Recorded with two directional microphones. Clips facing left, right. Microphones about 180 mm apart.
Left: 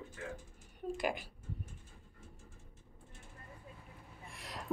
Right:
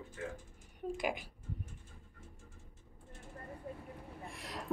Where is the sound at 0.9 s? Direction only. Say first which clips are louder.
Left 1 dB; 15° right (ahead or behind).